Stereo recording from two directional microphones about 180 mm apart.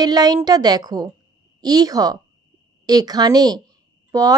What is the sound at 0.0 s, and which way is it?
Speech, 20° right (ahead or behind).